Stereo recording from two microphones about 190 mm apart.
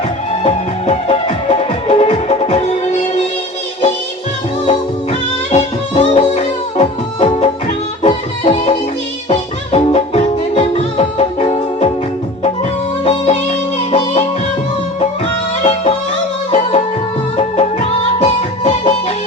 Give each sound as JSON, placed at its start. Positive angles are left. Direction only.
{"t": 0.4, "sound": "music", "side_deg": 30}
{"t": 5.5, "sound": "music", "side_deg": 35}
{"t": 13.1, "sound": "music", "side_deg": 30}
{"t": 15.6, "sound": "music", "side_deg": 30}
{"t": 17.3, "sound": "music", "side_deg": 30}